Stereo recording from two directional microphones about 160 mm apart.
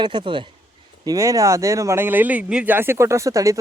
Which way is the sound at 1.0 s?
20° right (ahead or behind).